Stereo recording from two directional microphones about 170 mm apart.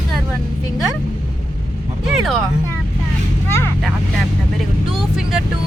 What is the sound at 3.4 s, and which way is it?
Vehicle, 15° left (ahead or behind).